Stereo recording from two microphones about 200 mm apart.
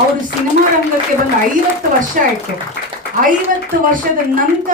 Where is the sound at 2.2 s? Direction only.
40° right (ahead or behind).